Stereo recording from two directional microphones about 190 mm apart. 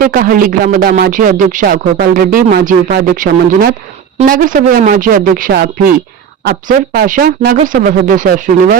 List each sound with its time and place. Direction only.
0.0 s speech: 50° right (ahead or behind)